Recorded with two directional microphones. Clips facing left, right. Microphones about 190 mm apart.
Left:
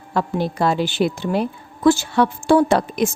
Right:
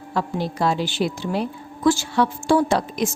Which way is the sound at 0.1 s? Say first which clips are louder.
Left 3 dB; 55° left (ahead or behind).